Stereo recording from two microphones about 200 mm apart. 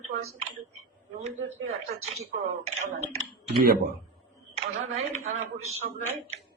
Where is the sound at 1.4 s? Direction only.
90° right.